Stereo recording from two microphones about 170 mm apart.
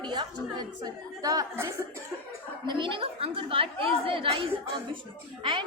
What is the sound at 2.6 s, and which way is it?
A woman's voice, 30° right (ahead or behind).